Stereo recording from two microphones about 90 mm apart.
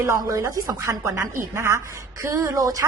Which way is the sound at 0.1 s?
35° right (ahead or behind).